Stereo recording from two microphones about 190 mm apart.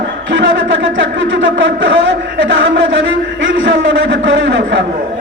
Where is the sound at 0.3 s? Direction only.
80° right.